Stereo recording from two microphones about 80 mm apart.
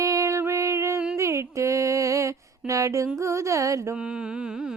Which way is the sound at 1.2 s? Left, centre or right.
Right.